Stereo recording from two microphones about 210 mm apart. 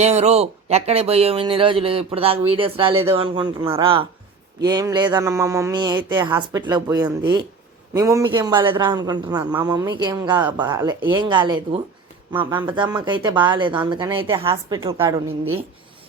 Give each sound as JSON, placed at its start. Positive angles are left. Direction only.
{"t": 0.0, "sound": "speech", "side_deg": -30}